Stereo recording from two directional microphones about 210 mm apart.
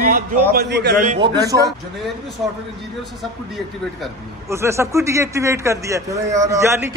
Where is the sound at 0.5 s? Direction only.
50° right (ahead or behind).